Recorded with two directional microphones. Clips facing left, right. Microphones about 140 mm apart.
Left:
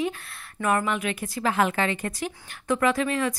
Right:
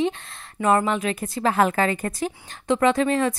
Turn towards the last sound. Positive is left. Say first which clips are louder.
# right 4 dB
turn(degrees=-30)  # may be behind; listen again after turning